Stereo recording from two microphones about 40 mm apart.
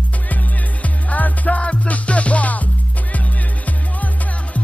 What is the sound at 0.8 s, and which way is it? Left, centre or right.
Music, left.